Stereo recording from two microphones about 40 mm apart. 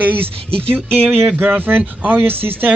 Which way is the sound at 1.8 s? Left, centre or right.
Right.